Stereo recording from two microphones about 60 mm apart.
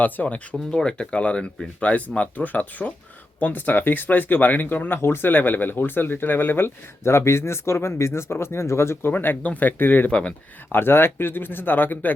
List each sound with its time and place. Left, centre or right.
0.0 s speech: left
0.7 s speech: centre; by 10.1 s left
10.1 s speech: centre
10.7 s speech: left